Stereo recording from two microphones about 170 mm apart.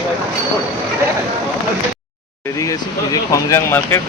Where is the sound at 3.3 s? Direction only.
15° left (ahead or behind).